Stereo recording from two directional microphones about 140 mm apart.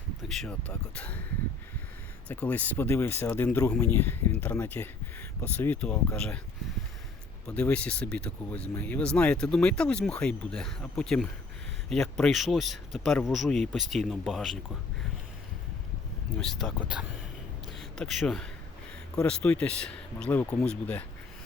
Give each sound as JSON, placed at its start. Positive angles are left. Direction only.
{"t": 0.2, "sound": "speech", "side_deg": 0}
{"t": 2.2, "sound": "speech", "side_deg": 10}
{"t": 7.4, "sound": "speech", "side_deg": 10}
{"t": 16.4, "sound": "speech", "side_deg": 0}
{"t": 20.4, "sound": "speech", "side_deg": 20}